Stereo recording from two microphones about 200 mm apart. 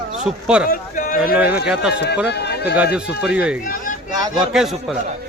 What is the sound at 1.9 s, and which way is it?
Speech, 55° left (ahead or behind).